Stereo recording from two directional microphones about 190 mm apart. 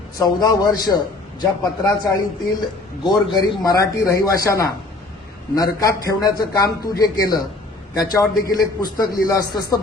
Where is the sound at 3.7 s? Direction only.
20° left (ahead or behind).